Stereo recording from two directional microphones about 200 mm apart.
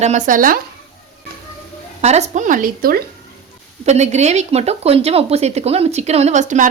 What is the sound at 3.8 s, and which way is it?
Speech, 35° right (ahead or behind).